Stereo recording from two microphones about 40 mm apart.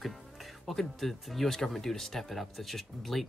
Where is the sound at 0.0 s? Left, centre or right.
Centre.